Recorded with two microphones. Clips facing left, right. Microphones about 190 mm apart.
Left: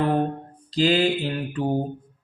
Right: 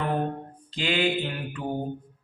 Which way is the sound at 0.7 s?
35° left (ahead or behind).